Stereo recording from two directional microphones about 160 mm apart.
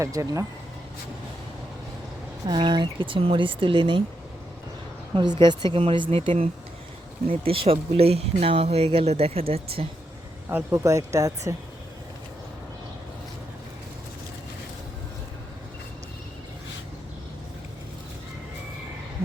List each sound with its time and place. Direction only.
0.0 s speech: 20° right (ahead or behind)
2.5 s speech: 30° right (ahead or behind)
5.1 s speech: 25° right (ahead or behind)
10.5 s speech: 20° right (ahead or behind)